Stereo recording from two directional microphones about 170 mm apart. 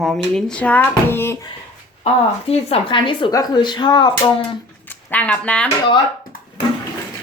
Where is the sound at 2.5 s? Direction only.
35° left (ahead or behind).